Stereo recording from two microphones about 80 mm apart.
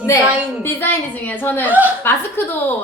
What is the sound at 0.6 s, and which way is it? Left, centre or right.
A woman's voice, left.